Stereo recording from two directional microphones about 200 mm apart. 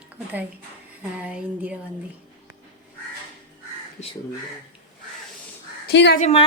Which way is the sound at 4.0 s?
35° left (ahead or behind).